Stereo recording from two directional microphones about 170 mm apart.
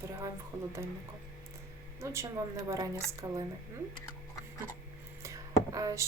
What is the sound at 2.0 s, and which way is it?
Speech, 15° right (ahead or behind).